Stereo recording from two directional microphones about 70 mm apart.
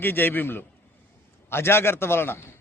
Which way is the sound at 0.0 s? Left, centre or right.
Left.